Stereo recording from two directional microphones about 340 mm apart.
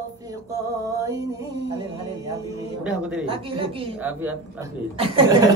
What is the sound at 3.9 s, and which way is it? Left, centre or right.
A man's voice, centre.